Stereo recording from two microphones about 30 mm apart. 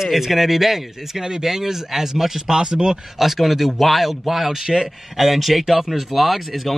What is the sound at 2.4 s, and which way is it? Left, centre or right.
Speech, right.